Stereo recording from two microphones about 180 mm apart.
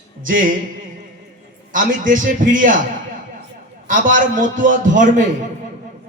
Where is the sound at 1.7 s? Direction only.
45° right (ahead or behind).